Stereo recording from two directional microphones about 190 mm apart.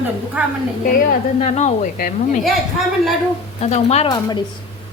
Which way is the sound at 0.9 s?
40° left (ahead or behind).